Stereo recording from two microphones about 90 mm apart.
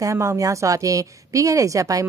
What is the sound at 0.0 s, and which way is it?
A woman's voice, 35° right (ahead or behind).